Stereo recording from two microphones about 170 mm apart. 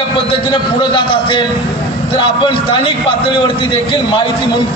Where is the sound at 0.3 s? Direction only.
30° left (ahead or behind).